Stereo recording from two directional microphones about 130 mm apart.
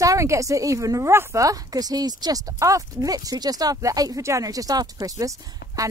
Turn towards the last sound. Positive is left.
turn(degrees=-25)  # may be behind; listen again after turning